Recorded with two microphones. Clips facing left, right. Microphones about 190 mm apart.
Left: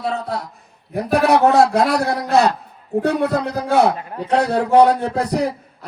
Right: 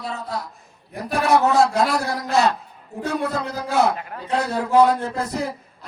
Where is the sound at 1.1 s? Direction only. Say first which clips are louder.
Left 4 dB; 65° left (ahead or behind).